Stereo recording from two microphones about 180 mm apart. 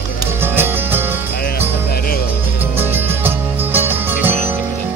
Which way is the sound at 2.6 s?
10° right (ahead or behind).